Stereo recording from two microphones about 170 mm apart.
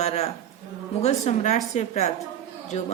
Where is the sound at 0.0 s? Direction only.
40° left (ahead or behind).